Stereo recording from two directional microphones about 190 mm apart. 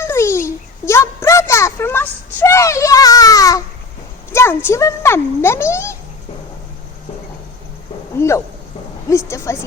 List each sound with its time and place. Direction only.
0.0 s a sound: 15° left (ahead or behind)
4.3 s speech: 15° left (ahead or behind)
9.0 s a woman's voice: 15° left (ahead or behind)